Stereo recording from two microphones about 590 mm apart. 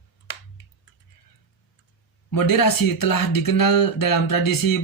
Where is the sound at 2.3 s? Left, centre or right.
Left.